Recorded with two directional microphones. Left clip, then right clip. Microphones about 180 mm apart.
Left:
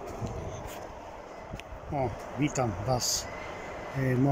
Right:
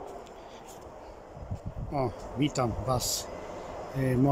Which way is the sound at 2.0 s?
5° right (ahead or behind).